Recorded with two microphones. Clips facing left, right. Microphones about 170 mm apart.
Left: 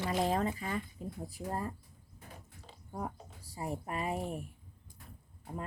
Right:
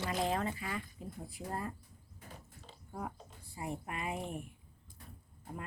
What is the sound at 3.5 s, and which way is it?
Speech, 40° left (ahead or behind).